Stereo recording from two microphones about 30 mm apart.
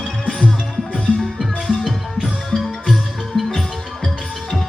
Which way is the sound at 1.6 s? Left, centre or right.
Centre.